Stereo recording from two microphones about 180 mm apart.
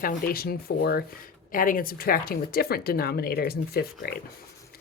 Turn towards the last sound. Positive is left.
turn(degrees=60)  # may be behind; listen again after turning